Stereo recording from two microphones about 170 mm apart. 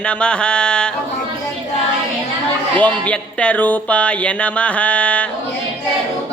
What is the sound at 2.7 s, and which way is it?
Speech, 10° left (ahead or behind).